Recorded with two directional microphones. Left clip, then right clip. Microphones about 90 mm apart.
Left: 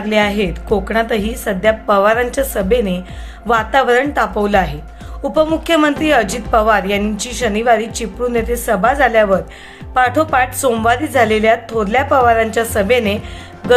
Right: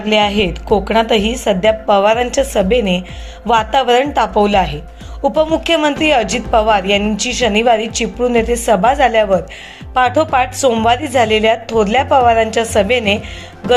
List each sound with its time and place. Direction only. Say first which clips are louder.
0.1 s a woman's voice: right 2 dB; 20° right (ahead or behind)
5.2 s a woman's voice: right 1 dB; 10° right (ahead or behind); by 13.1 s 25° right (ahead or behind)
13.6 s music: left 1 dB; centre (ahead or behind)